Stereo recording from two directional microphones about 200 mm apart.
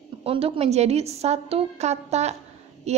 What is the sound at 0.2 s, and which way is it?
A woman's voice, 30° right (ahead or behind).